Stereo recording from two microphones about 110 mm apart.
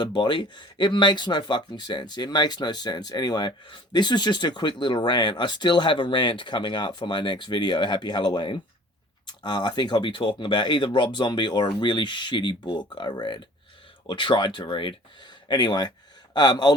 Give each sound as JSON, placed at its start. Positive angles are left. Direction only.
{"t": 0.0, "sound": "speech", "side_deg": 45}